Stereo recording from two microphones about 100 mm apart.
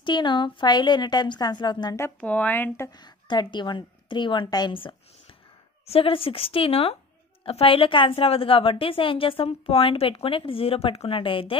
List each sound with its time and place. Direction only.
0.0 s a woman's voice: 50° left (ahead or behind)
2.1 s speech: 15° left (ahead or behind)
3.0 s a woman's voice: 50° left (ahead or behind)
5.9 s a woman's voice: 70° left (ahead or behind)